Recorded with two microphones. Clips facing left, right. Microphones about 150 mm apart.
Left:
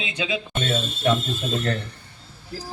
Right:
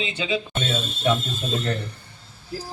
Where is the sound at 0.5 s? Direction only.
5° right (ahead or behind).